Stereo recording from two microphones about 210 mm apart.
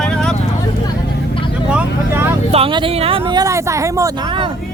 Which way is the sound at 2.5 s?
25° right (ahead or behind).